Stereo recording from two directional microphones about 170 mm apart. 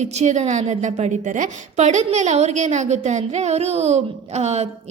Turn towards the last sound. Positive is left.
turn(degrees=-40)  # may be behind; listen again after turning